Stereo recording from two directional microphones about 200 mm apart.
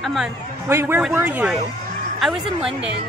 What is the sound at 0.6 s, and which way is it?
A woman's voice, 10° right (ahead or behind).